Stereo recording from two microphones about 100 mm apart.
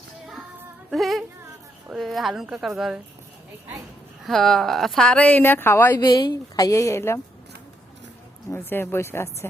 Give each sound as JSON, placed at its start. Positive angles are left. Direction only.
{"t": 0.9, "sound": "a woman's voice", "side_deg": 0}
{"t": 4.2, "sound": "speech", "side_deg": 5}
{"t": 6.0, "sound": "speech", "side_deg": 50}
{"t": 6.7, "sound": "speech", "side_deg": 30}
{"t": 8.4, "sound": "speech", "side_deg": 20}